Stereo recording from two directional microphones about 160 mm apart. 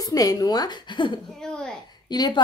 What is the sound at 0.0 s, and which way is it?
A woman's voice, 20° left (ahead or behind).